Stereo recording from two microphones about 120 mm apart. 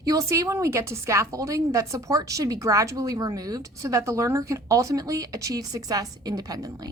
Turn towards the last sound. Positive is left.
turn(degrees=-30)  # may be behind; listen again after turning